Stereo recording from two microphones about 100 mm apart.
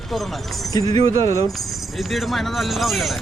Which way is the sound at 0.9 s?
70° right (ahead or behind).